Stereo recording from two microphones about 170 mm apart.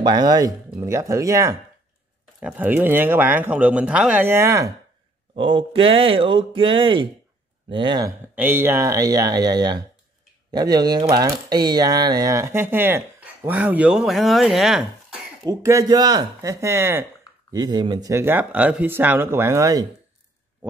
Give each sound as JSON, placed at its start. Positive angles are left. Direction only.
{"t": 0.0, "sound": "speech", "side_deg": -25}
{"t": 5.3, "sound": "speech", "side_deg": -30}
{"t": 8.4, "sound": "speech", "side_deg": -10}
{"t": 15.4, "sound": "speech", "side_deg": -20}
{"t": 17.5, "sound": "speech", "side_deg": -25}